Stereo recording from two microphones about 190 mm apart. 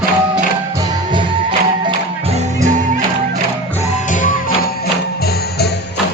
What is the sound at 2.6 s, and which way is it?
Music, 40° right (ahead or behind).